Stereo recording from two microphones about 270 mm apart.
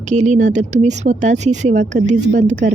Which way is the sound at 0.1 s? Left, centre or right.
Right.